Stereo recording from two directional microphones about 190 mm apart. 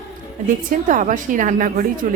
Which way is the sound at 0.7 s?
45° right (ahead or behind).